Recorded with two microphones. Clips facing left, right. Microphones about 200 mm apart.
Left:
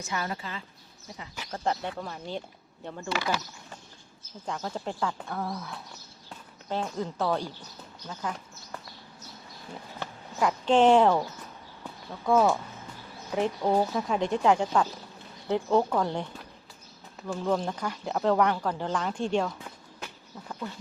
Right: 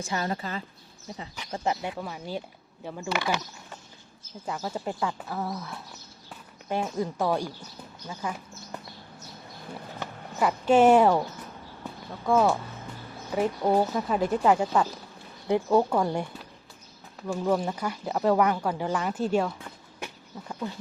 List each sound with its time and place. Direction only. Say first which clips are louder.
0.0 s speech: right 3 dB; 30° right (ahead or behind)
1.5 s speech: right 1 dB; 10° right (ahead or behind)
4.4 s speech: right 2 dB; 5° right (ahead or behind)
10.0 s speech: right 1 dB; 10° right (ahead or behind)
12.2 s speech: even; centre (ahead or behind)